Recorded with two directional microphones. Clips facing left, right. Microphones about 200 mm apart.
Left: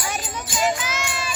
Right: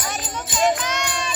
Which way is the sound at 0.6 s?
5° left (ahead or behind).